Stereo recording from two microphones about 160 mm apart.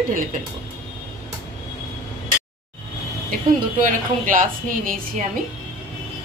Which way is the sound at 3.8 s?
55° right (ahead or behind).